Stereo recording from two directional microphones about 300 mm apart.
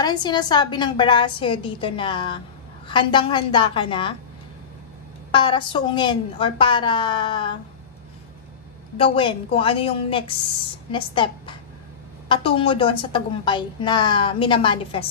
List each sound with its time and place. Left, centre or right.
0.0 s a woman's voice: centre
5.3 s a woman's voice: centre
9.0 s a woman's voice: centre